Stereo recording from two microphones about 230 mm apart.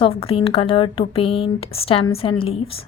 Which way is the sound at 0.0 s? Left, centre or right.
Left.